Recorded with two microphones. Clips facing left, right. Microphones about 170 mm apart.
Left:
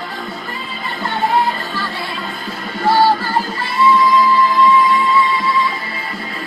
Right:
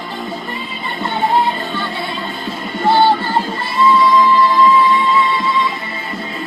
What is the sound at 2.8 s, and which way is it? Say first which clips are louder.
Music: right 1 dB; 25° right (ahead or behind).